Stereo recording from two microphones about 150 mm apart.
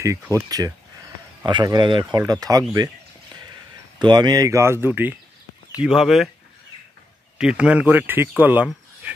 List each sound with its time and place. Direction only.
0.0 s speech: 20° right (ahead or behind)
4.0 s speech: 30° right (ahead or behind); by 6.3 s centre (ahead or behind)
7.3 s speech: 5° right (ahead or behind)